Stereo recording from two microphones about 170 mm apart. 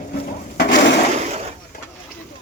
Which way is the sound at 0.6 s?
90° left.